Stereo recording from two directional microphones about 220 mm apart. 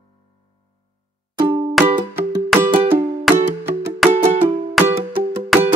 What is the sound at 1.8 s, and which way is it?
Music, 5° right (ahead or behind).